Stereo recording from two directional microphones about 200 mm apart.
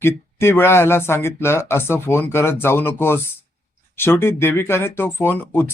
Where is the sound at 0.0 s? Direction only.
10° left (ahead or behind).